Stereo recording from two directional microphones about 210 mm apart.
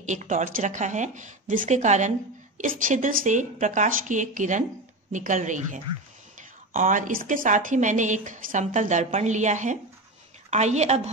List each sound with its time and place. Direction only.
0.0 s speech: 35° right (ahead or behind)